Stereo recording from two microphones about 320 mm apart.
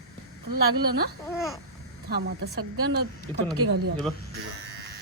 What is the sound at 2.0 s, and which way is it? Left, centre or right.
Speech, right.